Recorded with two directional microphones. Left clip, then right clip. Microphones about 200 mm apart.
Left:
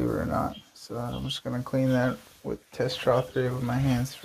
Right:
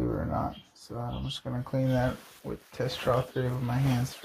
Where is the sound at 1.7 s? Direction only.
15° left (ahead or behind).